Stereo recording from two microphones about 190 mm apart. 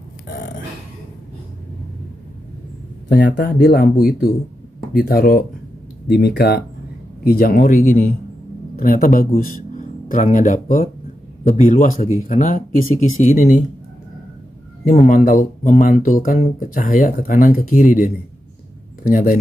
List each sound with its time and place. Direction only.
3.2 s speech: 65° left (ahead or behind); by 8.1 s 35° left (ahead or behind)
8.7 s a man's voice: 50° left (ahead or behind)
15.0 s speech: 45° left (ahead or behind)